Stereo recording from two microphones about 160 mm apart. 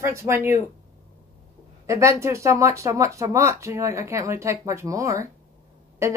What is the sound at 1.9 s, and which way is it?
Speech, 15° right (ahead or behind).